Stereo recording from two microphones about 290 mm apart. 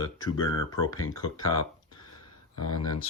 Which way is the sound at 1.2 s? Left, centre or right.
Left.